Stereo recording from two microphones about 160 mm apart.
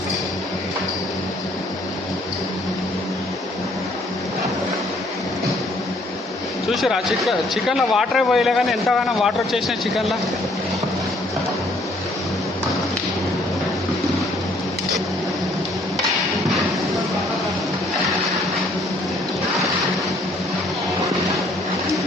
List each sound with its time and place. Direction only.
6.7 s speech: centre (ahead or behind)